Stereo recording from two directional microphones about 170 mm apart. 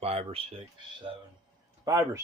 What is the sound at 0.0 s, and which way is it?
Speech, 35° right (ahead or behind).